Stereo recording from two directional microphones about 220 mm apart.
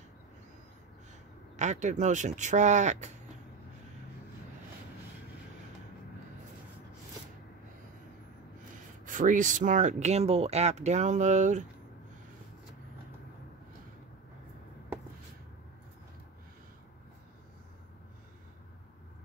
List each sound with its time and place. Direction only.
1.6 s speech: 35° right (ahead or behind)
9.0 s speech: 35° right (ahead or behind)